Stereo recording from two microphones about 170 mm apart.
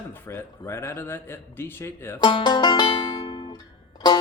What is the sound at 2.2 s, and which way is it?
Music, 25° left (ahead or behind).